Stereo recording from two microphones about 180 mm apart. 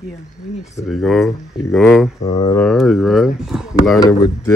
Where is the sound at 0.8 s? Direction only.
Centre (ahead or behind).